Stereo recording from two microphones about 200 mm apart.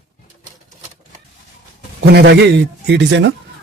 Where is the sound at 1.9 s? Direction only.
55° right (ahead or behind).